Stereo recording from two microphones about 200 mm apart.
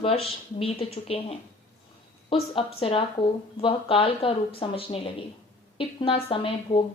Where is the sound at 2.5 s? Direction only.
30° left (ahead or behind).